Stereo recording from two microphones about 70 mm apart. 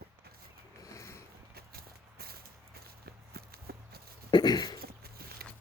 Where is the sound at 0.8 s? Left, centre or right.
Left.